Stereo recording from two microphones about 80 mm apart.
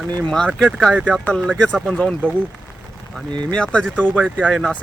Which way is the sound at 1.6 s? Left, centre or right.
Centre.